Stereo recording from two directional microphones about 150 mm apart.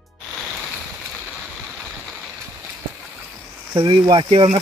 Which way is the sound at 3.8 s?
35° right (ahead or behind).